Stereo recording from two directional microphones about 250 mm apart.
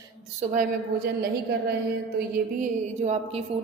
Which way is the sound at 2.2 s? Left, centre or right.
Right.